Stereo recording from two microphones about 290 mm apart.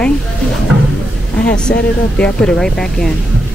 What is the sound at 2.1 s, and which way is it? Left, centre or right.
Speech, centre.